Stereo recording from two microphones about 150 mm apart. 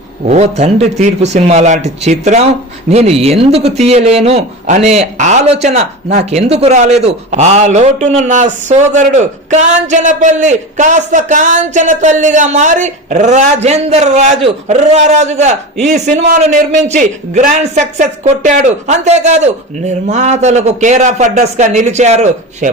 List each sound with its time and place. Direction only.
0.3 s a man's voice: 45° right (ahead or behind)